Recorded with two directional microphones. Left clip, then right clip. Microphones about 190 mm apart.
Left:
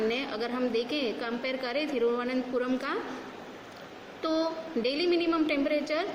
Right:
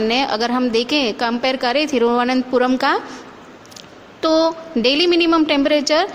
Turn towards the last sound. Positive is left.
turn(degrees=-50)  # may be behind; listen again after turning